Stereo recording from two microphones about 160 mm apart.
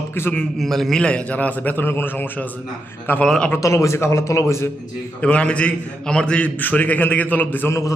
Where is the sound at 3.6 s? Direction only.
20° left (ahead or behind).